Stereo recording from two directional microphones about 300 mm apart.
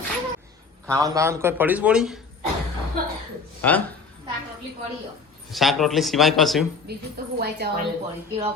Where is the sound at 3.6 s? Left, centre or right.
Centre.